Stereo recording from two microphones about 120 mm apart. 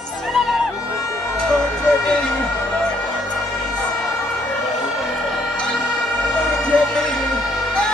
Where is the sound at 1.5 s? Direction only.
5° left (ahead or behind).